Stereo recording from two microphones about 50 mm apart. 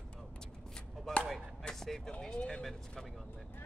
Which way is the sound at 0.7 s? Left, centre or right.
Centre.